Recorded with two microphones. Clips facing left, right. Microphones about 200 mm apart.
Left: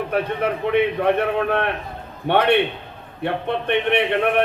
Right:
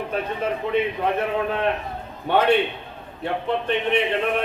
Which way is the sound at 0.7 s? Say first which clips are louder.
Left 5 dB; 65° left (ahead or behind).